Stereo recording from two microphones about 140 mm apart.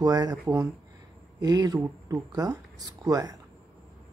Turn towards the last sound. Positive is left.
turn(degrees=-25)  # may be behind; listen again after turning